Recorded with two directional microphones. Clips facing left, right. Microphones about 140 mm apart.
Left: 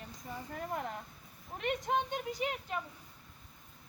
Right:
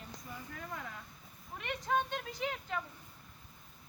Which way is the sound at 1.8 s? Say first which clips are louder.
Right 4 dB; 15° left (ahead or behind).